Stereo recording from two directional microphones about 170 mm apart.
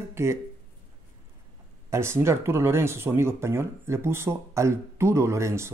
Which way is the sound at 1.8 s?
15° right (ahead or behind).